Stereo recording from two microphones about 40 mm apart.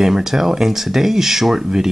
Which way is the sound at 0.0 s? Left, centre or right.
Centre.